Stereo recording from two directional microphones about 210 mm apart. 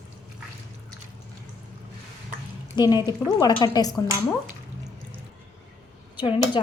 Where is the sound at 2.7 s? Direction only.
20° left (ahead or behind).